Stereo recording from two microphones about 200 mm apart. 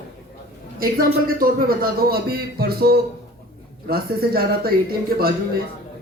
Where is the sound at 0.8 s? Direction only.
45° right (ahead or behind).